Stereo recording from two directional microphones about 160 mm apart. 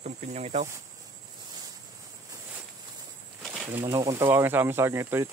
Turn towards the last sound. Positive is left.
turn(degrees=-15)  # may be behind; listen again after turning